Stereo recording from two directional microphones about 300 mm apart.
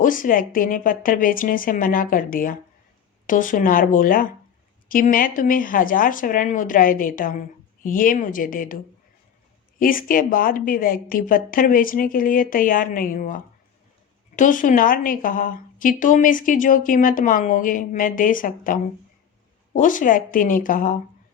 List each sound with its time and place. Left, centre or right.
0.0 s a woman's voice: left